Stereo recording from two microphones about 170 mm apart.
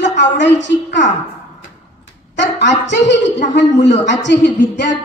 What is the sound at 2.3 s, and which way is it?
A woman's voice, 90° left.